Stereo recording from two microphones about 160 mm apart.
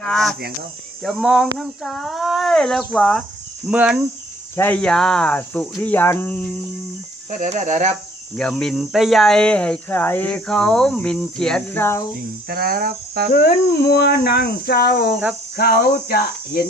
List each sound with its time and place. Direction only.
0.0 s speech: centre (ahead or behind)
3.7 s speech: 5° right (ahead or behind)
4.5 s speech: 10° left (ahead or behind)
7.3 s speech: 50° right (ahead or behind)
8.4 s speech: 5° left (ahead or behind)
12.5 s cricket: 70° right (ahead or behind)
13.3 s speech: 85° left
15.5 s speech: 75° left (ahead or behind)